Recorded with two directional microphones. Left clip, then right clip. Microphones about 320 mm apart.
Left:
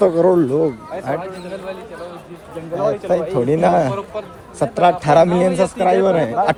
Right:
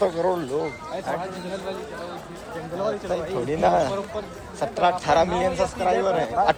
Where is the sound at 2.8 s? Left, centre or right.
Centre.